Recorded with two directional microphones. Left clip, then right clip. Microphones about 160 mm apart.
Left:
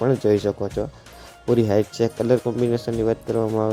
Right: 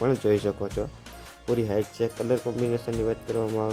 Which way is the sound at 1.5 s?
25° left (ahead or behind).